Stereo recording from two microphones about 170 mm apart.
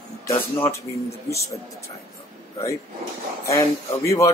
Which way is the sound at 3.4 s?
15° left (ahead or behind).